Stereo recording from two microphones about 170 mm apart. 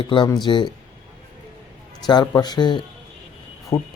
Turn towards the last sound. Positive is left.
turn(degrees=20)  # may be behind; listen again after turning